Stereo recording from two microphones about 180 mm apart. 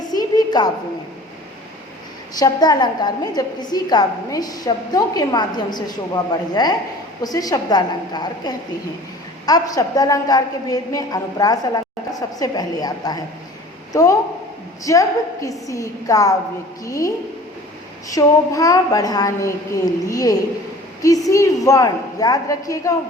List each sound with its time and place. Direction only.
0.1 s a sound: 20° left (ahead or behind)
2.4 s a woman's voice: 20° left (ahead or behind)
18.1 s a woman's voice: 20° left (ahead or behind)